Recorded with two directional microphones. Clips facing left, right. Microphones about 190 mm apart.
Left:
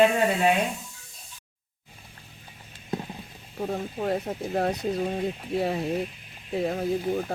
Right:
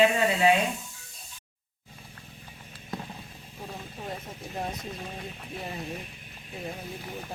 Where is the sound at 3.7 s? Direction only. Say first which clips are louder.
Left 11 dB; 65° left (ahead or behind).